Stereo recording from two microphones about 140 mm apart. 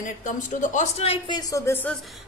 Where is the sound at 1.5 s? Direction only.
20° left (ahead or behind).